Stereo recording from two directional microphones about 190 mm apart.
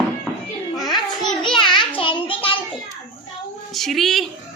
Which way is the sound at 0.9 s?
20° left (ahead or behind).